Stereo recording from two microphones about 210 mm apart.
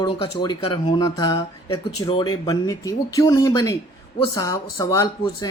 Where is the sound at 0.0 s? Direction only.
25° left (ahead or behind).